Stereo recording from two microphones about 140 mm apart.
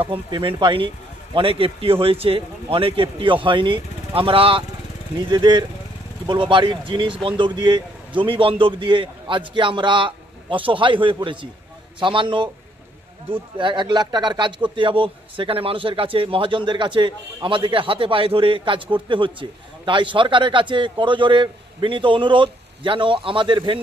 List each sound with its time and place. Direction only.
0.0 s a man's voice: 40° right (ahead or behind)
13.6 s a man's voice: 35° right (ahead or behind)